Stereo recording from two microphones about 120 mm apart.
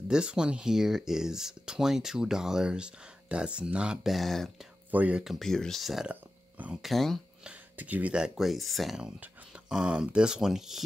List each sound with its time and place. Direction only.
0.1 s speech: 5° right (ahead or behind)
4.9 s speech: 10° right (ahead or behind)
7.7 s speech: 15° right (ahead or behind)